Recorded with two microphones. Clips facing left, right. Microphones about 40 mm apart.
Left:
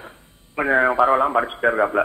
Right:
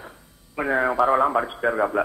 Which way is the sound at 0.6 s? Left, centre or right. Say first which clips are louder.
Left 4 dB; left.